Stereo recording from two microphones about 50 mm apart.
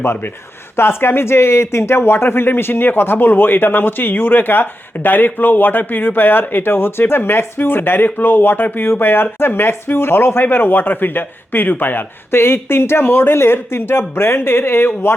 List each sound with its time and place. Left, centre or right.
0.0 s speech: left